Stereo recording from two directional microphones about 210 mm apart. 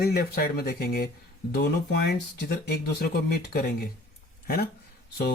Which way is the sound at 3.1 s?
50° left (ahead or behind).